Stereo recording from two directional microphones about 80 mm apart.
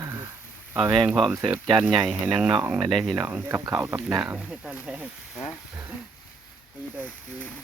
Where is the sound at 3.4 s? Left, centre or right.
Right.